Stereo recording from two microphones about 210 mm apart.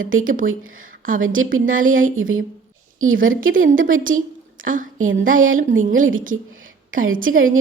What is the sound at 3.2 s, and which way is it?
A woman's voice, 40° right (ahead or behind).